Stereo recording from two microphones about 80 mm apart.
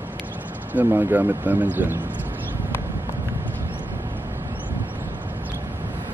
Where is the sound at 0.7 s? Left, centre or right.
Right.